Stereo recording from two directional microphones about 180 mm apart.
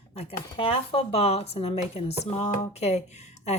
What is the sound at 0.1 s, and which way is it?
Speech, 35° left (ahead or behind).